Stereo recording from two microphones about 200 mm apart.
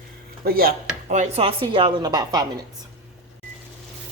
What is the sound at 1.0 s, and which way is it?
Speech, 35° right (ahead or behind).